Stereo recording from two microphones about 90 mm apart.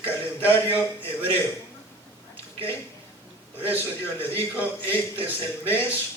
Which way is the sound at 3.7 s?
25° left (ahead or behind).